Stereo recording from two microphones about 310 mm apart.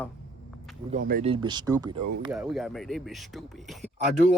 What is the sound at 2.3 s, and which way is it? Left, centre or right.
Speech, centre.